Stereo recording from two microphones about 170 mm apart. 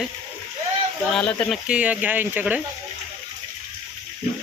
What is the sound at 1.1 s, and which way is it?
Speech, 5° left (ahead or behind).